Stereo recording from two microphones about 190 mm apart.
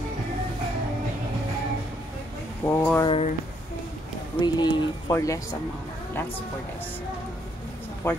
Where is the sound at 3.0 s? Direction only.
30° left (ahead or behind).